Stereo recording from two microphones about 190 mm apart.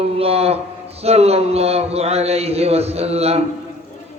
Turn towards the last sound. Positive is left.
turn(degrees=-35)  # may be behind; listen again after turning